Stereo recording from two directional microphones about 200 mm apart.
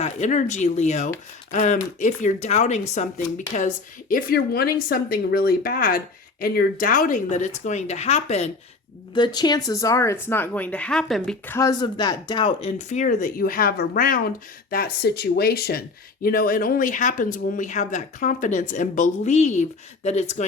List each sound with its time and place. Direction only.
0.0 s a woman's voice: 35° left (ahead or behind)
9.1 s speech: 20° left (ahead or behind)